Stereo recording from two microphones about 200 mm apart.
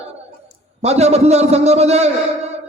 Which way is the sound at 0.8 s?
35° right (ahead or behind).